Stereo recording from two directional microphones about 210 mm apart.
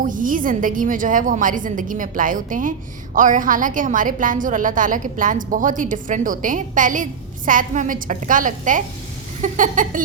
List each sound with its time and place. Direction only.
0.0 s a woman's voice: 40° right (ahead or behind)